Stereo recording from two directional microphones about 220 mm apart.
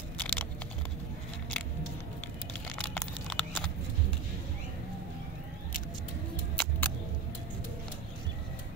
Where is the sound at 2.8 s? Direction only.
5° left (ahead or behind).